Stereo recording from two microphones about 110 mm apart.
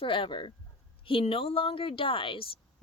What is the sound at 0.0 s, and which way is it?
Speech, 50° left (ahead or behind).